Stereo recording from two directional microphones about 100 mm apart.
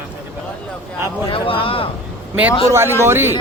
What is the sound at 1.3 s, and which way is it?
Speech, 65° left (ahead or behind).